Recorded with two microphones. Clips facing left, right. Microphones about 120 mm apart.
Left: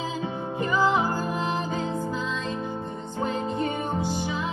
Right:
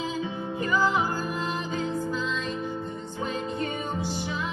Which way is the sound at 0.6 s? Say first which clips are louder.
Left 2 dB; 20° left (ahead or behind).